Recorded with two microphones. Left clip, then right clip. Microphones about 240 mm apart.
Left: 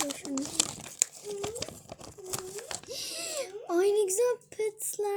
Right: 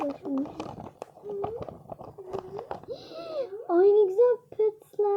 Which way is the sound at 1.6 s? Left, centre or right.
Left.